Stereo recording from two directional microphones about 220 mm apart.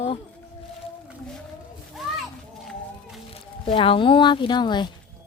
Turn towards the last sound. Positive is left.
turn(degrees=20)  # may be behind; listen again after turning